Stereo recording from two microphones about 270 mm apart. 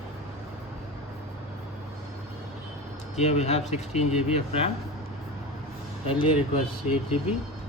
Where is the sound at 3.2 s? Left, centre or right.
Left.